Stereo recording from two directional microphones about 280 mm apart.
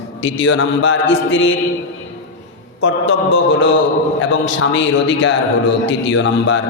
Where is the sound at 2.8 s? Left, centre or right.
Left.